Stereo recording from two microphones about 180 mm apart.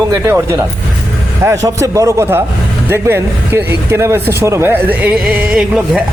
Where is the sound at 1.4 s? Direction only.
15° right (ahead or behind).